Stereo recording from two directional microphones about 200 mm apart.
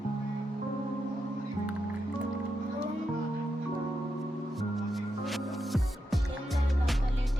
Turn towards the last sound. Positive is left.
turn(degrees=0)  # may be behind; listen again after turning